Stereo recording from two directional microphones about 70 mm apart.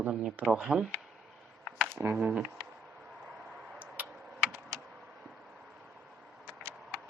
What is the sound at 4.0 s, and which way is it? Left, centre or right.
Computer keyboard, right.